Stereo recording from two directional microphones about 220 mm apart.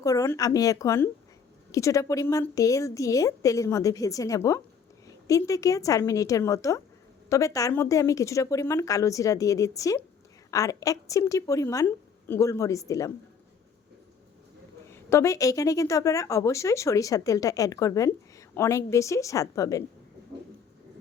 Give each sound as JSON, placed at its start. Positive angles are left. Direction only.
{"t": 0.0, "sound": "a woman's voice", "side_deg": 15}
{"t": 15.1, "sound": "a woman's voice", "side_deg": 15}